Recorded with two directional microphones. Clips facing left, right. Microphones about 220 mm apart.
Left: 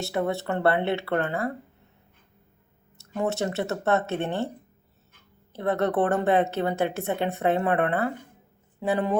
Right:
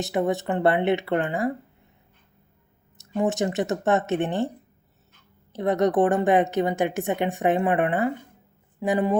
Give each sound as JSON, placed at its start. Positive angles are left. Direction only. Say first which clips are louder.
{"t": 0.0, "sound": "a woman's voice", "louder": "right 3 dB", "side_deg": -15}
{"t": 3.0, "sound": "a woman's voice", "louder": "right 3 dB", "side_deg": -15}
{"t": 5.5, "sound": "a woman's voice", "louder": "right 3 dB", "side_deg": -15}